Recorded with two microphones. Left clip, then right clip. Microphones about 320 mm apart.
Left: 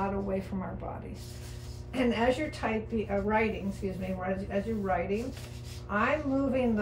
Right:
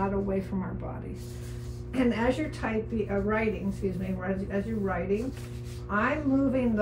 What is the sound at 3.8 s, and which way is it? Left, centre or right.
A woman's voice, centre.